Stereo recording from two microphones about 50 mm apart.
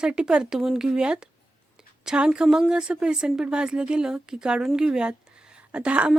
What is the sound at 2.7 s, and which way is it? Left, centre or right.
A woman's voice, centre.